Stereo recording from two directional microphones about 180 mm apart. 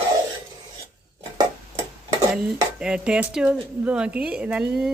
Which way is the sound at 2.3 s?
5° right (ahead or behind).